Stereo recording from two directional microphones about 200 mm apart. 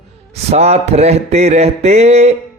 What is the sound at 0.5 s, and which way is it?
A man's voice, 30° right (ahead or behind).